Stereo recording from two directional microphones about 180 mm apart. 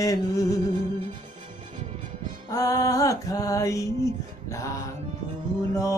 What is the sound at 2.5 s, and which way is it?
Music, 20° left (ahead or behind).